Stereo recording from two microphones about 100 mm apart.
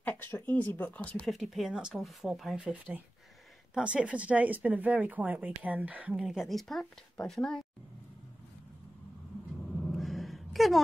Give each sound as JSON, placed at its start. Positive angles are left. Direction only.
{"t": 0.0, "sound": "speech", "side_deg": 20}
{"t": 1.2, "sound": "speech", "side_deg": 0}
{"t": 9.8, "sound": "a sound", "side_deg": 5}